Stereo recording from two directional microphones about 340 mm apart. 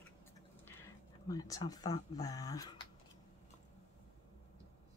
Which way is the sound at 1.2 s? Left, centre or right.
Centre.